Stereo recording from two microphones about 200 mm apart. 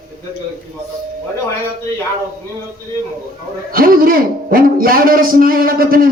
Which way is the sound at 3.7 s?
45° right (ahead or behind).